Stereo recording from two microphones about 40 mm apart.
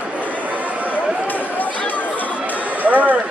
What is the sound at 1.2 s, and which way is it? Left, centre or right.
Run, left.